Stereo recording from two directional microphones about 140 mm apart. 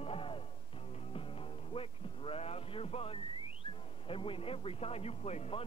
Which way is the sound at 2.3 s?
45° left (ahead or behind).